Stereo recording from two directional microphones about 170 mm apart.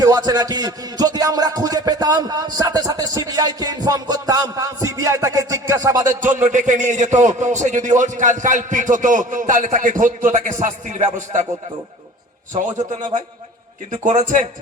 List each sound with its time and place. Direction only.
0.0 s music: 20° right (ahead or behind)
6.5 s a man's voice: 45° right (ahead or behind)
12.5 s a man's voice: 45° right (ahead or behind)